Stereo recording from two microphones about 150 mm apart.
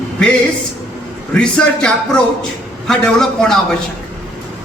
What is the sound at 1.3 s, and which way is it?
A man's voice, 5° left (ahead or behind).